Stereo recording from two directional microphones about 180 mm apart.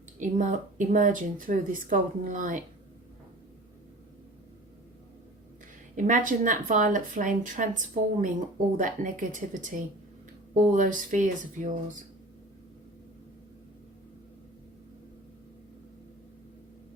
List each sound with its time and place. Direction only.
0.2 s speech: 45° right (ahead or behind)
6.1 s speech: 45° right (ahead or behind)